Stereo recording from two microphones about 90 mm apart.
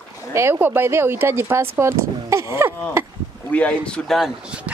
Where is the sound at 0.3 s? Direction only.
30° right (ahead or behind).